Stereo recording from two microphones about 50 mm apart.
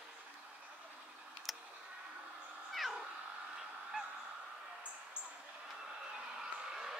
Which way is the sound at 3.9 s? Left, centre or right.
Centre.